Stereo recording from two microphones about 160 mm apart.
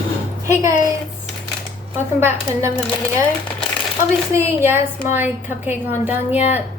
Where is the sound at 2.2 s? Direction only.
15° right (ahead or behind).